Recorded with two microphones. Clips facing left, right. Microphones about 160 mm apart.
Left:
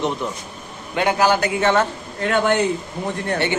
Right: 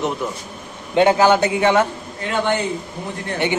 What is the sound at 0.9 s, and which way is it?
Speech, 25° right (ahead or behind).